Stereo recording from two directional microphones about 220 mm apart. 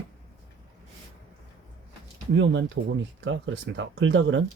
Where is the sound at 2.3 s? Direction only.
55° right (ahead or behind).